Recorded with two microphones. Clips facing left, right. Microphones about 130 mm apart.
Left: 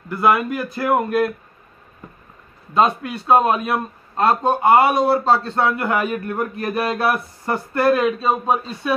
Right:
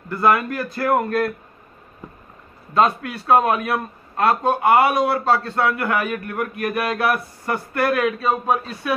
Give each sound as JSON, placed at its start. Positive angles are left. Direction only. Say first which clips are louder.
{"t": 0.1, "sound": "a man's voice", "louder": "left 1 dB", "side_deg": 10}
{"t": 2.7, "sound": "a man's voice", "louder": "left 1 dB", "side_deg": 20}